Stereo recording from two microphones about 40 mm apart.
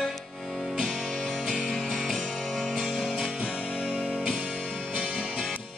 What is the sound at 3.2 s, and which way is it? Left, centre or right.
Music, right.